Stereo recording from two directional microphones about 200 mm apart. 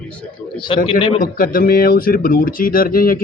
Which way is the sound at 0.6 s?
25° left (ahead or behind).